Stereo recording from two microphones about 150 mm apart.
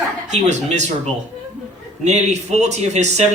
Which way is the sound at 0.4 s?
50° right (ahead or behind).